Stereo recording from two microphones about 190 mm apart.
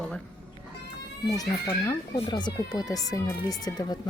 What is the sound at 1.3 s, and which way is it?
Speech, 20° left (ahead or behind).